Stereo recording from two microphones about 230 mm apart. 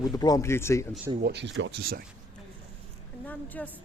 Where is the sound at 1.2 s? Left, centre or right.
Right.